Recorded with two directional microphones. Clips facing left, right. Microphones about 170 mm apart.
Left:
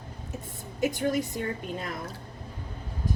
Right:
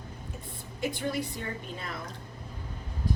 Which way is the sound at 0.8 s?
45° left (ahead or behind).